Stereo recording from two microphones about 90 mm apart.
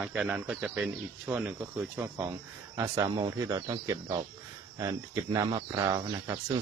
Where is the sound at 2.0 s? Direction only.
30° right (ahead or behind).